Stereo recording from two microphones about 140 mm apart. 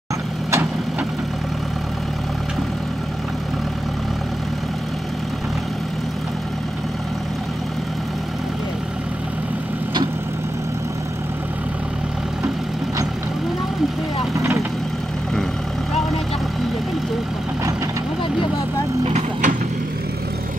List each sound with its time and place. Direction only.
14.3 s vehicle: 20° right (ahead or behind)
19.0 s vehicle: 50° right (ahead or behind)